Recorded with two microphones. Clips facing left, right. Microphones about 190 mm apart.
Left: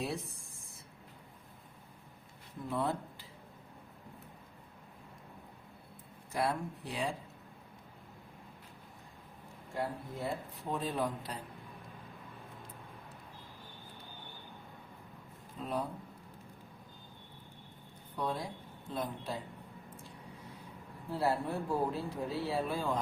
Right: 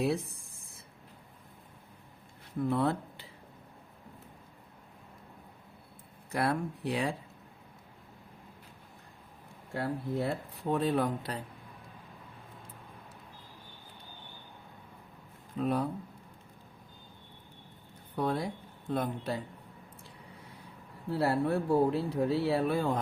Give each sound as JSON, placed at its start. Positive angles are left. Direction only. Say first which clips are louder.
{"t": 2.6, "sound": "speech", "louder": "right 5 dB", "side_deg": -70}
{"t": 6.3, "sound": "speech", "louder": "right 3 dB", "side_deg": -65}
{"t": 9.7, "sound": "speech", "louder": "right 6 dB", "side_deg": -70}
{"t": 15.5, "sound": "speech", "louder": "right 7 dB", "side_deg": -65}
{"t": 18.2, "sound": "a man's voice", "louder": "right 5 dB", "side_deg": -65}
{"t": 21.1, "sound": "speech", "louder": "right 5 dB", "side_deg": -70}